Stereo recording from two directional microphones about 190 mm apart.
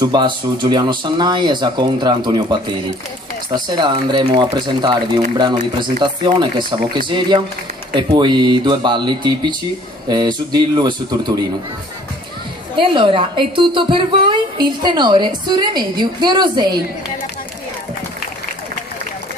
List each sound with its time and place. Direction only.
0.0 s a woman's voice: 20° right (ahead or behind)
3.5 s a woman's voice: 20° right (ahead or behind)
12.7 s a woman's voice: 25° right (ahead or behind)